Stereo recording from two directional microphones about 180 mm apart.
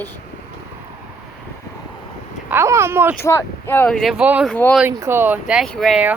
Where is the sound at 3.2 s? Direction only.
15° left (ahead or behind); by 4.5 s 5° right (ahead or behind).